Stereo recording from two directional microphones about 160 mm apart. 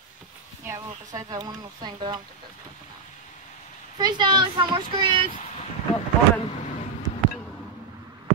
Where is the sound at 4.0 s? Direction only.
25° right (ahead or behind).